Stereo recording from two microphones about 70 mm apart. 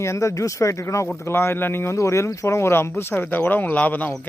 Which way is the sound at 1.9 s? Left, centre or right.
Left.